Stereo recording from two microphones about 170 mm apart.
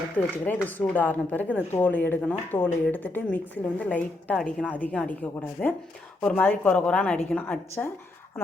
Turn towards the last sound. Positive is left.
turn(degrees=10)  # may be behind; listen again after turning